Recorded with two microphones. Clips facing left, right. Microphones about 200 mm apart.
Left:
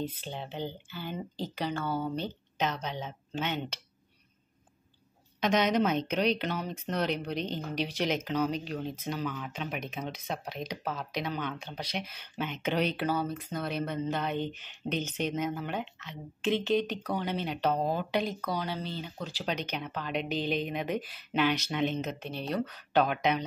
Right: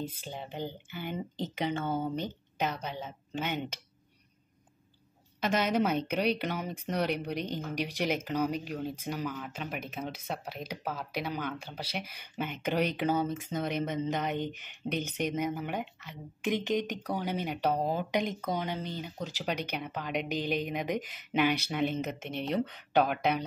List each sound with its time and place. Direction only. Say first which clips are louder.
0.0 s a woman's voice: left 2 dB; 10° right (ahead or behind)
5.4 s a woman's voice: left 2 dB; 5° right (ahead or behind)
22.2 s speech: right 1 dB; 20° right (ahead or behind)
23.0 s a woman's voice: left 1 dB; 5° right (ahead or behind)